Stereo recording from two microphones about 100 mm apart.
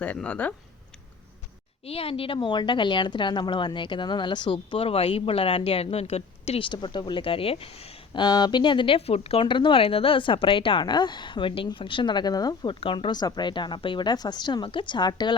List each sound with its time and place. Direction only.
0.0 s speech: 15° left (ahead or behind)
1.8 s a woman's voice: 75° left (ahead or behind)
6.7 s speech: 50° left (ahead or behind); by 8.0 s 80° left
8.1 s speech: 45° left (ahead or behind)
9.0 s a woman's voice: 90° left; by 12.7 s 40° left (ahead or behind)
12.8 s a woman's voice: 65° left (ahead or behind)
13.1 s speech: 45° left (ahead or behind)